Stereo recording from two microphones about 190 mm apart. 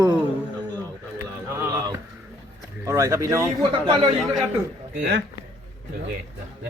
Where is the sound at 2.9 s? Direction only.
15° right (ahead or behind).